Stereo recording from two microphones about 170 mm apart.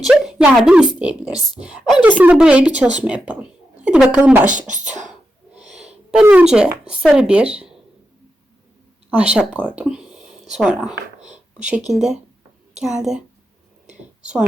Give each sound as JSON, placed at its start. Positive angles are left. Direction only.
{"t": 0.0, "sound": "a woman's voice", "side_deg": -5}
{"t": 4.5, "sound": "speech", "side_deg": -45}
{"t": 6.2, "sound": "speech", "side_deg": -5}
{"t": 9.0, "sound": "a woman's voice", "side_deg": -5}